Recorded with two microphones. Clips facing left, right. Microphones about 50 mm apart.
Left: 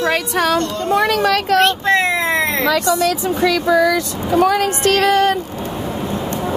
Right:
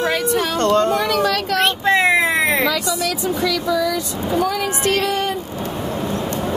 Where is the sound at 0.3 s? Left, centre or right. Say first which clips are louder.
Left 3 dB; left.